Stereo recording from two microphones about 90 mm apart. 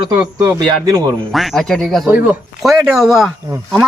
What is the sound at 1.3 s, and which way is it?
A man's voice, centre (ahead or behind).